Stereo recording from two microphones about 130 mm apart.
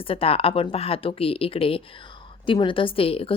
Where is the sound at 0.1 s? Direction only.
45° left (ahead or behind).